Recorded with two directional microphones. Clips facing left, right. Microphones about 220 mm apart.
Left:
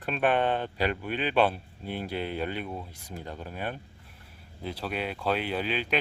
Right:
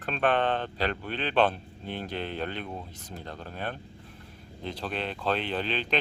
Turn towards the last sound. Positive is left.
turn(degrees=10)  # may be behind; listen again after turning